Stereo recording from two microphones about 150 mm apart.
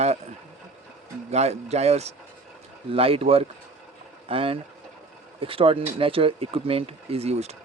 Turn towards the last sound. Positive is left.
turn(degrees=-45)  # may be behind; listen again after turning